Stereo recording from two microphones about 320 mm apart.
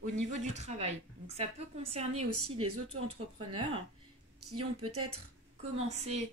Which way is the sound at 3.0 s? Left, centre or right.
Right.